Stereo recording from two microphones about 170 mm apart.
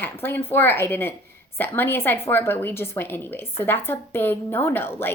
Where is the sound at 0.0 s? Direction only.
15° left (ahead or behind).